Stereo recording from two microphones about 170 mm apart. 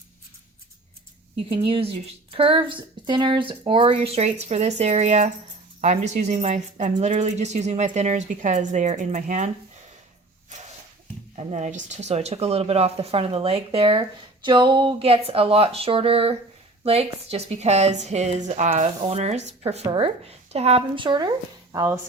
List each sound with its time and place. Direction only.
1.5 s a woman's voice: 30° right (ahead or behind)
10.5 s a sound: 45° right (ahead or behind)
11.3 s a woman's voice: 45° right (ahead or behind); by 21.9 s 20° right (ahead or behind)